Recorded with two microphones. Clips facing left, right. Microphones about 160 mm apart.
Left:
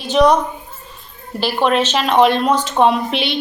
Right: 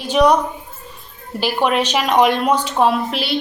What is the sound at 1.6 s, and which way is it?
Speech, 10° right (ahead or behind).